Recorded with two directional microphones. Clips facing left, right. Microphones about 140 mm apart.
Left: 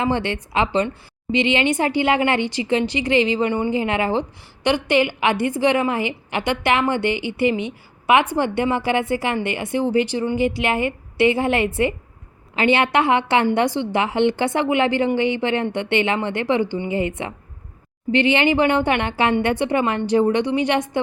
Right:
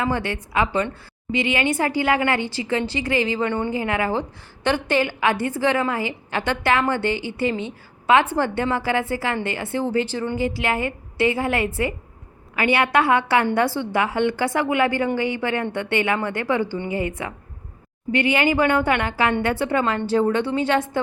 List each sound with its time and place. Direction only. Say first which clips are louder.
0.0 s a woman's voice: left 2 dB; 25° left (ahead or behind)